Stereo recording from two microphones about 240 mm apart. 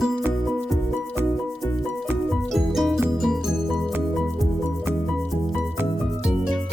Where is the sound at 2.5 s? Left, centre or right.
Centre.